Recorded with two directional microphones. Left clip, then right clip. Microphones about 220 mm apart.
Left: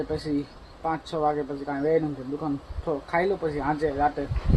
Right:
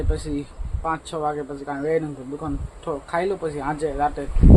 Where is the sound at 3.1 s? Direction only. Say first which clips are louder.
Right 1 dB; centre (ahead or behind).